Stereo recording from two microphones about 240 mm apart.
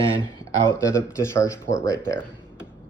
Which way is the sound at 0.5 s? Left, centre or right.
Centre.